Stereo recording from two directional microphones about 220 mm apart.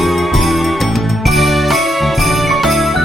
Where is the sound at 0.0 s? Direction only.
Centre (ahead or behind).